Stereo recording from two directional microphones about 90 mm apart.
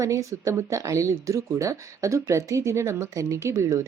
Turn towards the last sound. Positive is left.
turn(degrees=-40)  # may be behind; listen again after turning